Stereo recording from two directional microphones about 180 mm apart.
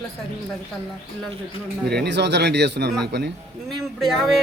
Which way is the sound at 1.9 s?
70° right (ahead or behind).